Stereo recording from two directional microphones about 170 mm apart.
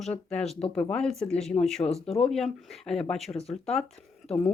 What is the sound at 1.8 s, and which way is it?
Speech, 35° left (ahead or behind).